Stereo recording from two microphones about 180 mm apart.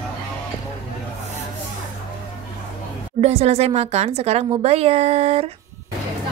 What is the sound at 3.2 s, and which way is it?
A woman's voice, 35° right (ahead or behind).